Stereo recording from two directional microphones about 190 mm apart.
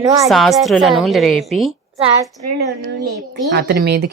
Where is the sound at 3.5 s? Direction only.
55° right (ahead or behind).